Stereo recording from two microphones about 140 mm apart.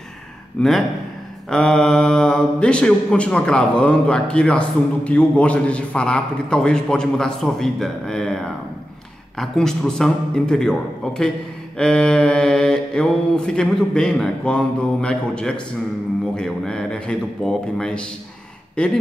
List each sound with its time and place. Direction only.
0.6 s mantra: centre (ahead or behind)
18.8 s speech: 5° left (ahead or behind)